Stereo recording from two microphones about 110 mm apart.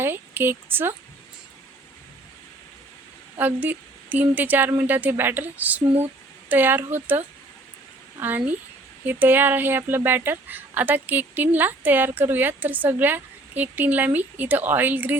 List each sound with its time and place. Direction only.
0.0 s speech: 20° right (ahead or behind)
3.3 s a woman's voice: 15° right (ahead or behind)